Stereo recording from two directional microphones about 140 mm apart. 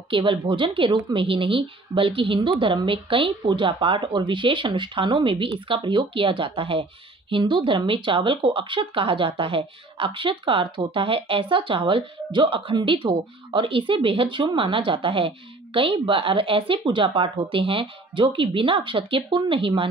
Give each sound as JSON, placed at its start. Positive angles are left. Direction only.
{"t": 0.1, "sound": "speech", "side_deg": -35}